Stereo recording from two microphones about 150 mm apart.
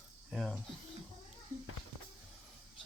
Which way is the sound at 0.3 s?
Centre (ahead or behind).